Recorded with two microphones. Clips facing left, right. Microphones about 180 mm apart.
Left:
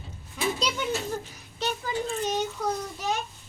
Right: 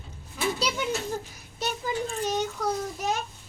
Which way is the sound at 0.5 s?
5° right (ahead or behind).